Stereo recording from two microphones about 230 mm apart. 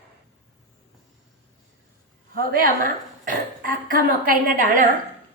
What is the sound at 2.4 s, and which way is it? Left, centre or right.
Speech, right.